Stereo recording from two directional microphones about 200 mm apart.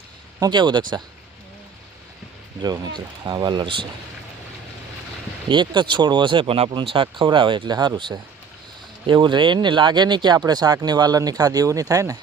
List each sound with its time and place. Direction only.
0.3 s speech: 20° right (ahead or behind)
2.6 s speech: 20° right (ahead or behind)
5.5 s speech: 25° right (ahead or behind)